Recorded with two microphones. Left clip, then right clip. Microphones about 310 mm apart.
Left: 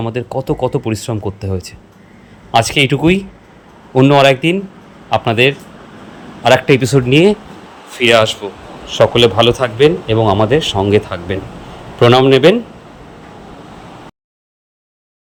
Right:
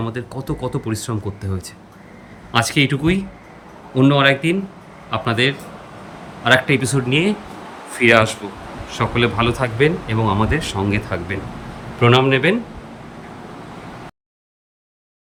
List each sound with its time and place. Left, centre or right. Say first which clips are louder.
0.0 s a man's voice: left 8 dB; centre